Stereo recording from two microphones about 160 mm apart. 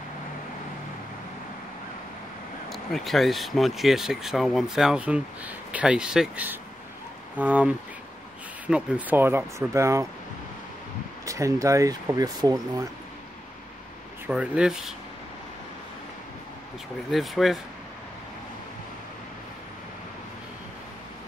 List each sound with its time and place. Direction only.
2.7 s speech: centre (ahead or behind); by 10.0 s 20° right (ahead or behind)
11.2 s speech: 20° right (ahead or behind)
14.2 s speech: 5° right (ahead or behind)
17.1 s speech: centre (ahead or behind)